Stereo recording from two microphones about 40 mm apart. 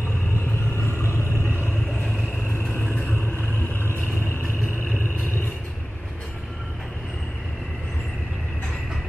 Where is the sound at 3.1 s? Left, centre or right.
Left.